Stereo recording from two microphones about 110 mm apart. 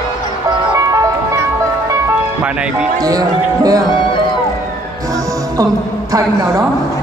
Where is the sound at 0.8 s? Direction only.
35° right (ahead or behind).